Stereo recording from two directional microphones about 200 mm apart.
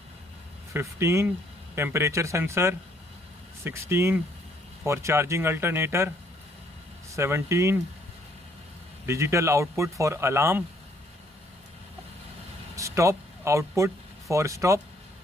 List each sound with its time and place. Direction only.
0.7 s speech: 15° right (ahead or behind)
7.2 s speech: 15° right (ahead or behind)
9.0 s speech: 15° right (ahead or behind)
12.7 s speech: 15° right (ahead or behind)